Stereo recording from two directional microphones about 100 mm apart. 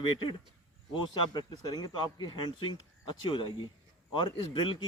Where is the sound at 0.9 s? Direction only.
50° left (ahead or behind).